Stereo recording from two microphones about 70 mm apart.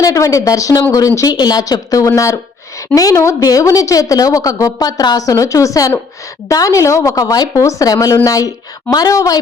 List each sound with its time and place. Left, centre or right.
0.0 s a woman's voice: left